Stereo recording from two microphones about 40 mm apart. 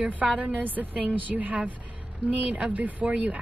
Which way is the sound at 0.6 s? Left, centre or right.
Right.